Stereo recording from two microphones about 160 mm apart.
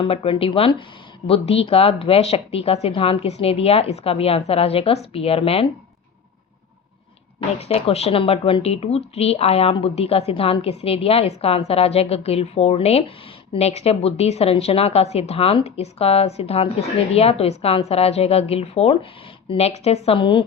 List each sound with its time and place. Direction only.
0.0 s speech: 35° left (ahead or behind)
7.6 s speech: 40° left (ahead or behind)